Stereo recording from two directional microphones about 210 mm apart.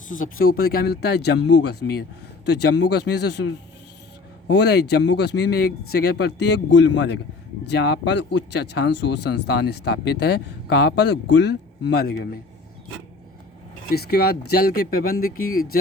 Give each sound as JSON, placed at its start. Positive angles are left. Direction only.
{"t": 0.5, "sound": "speech", "side_deg": 45}
{"t": 4.5, "sound": "speech", "side_deg": 50}
{"t": 13.9, "sound": "speech", "side_deg": 50}